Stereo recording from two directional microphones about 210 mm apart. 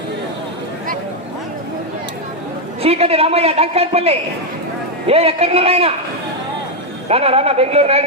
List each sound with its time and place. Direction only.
2.8 s a woman's voice: 30° right (ahead or behind)
7.1 s a woman's voice: 30° right (ahead or behind)